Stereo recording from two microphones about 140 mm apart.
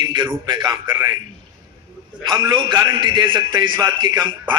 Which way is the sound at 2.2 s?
30° right (ahead or behind).